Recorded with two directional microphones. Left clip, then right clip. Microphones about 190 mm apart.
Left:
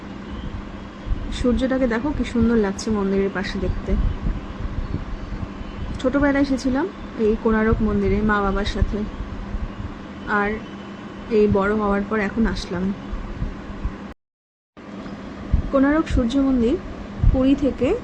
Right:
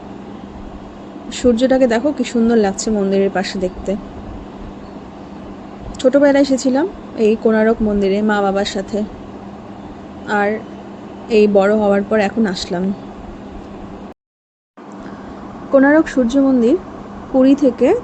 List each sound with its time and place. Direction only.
1.3 s a woman's voice: 15° right (ahead or behind)
6.0 s a woman's voice: 15° right (ahead or behind)
10.2 s a woman's voice: 15° right (ahead or behind)
15.7 s speech: 20° right (ahead or behind)